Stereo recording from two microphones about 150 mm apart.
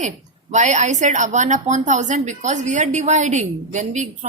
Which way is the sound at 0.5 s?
50° right (ahead or behind).